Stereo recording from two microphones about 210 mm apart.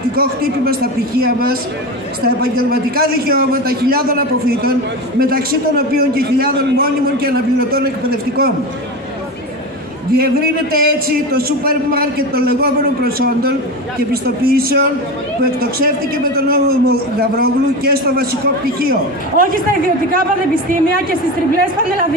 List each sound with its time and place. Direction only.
0.1 s a man's voice: 45° right (ahead or behind)
10.1 s a man's voice: 45° right (ahead or behind)
16.3 s a man's voice: 45° right (ahead or behind)